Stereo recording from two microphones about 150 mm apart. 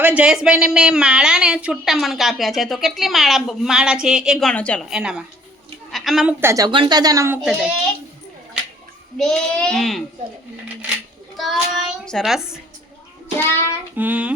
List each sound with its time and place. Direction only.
0.0 s speech: 10° right (ahead or behind); by 4.9 s 10° left (ahead or behind)
4.9 s a woman's voice: 5° right (ahead or behind)
6.4 s speech: 20° right (ahead or behind)
6.7 s speech: 30° right (ahead or behind)
7.4 s speech: centre (ahead or behind)
9.1 s speech: 5° left (ahead or behind)
11.3 s child singing: centre (ahead or behind)
12.0 s speech: centre (ahead or behind)
13.5 s child singing: 15° left (ahead or behind)
13.9 s music: 10° right (ahead or behind)